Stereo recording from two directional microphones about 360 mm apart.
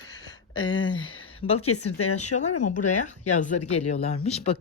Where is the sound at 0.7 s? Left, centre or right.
Centre.